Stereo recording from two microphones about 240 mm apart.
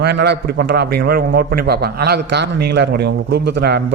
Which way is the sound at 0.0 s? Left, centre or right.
Right.